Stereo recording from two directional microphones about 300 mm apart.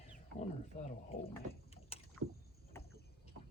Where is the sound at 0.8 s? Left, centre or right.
Left.